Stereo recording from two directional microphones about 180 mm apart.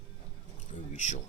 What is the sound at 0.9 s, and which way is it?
Speech, 40° left (ahead or behind).